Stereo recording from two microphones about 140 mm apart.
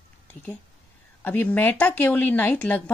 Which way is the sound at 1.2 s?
10° left (ahead or behind).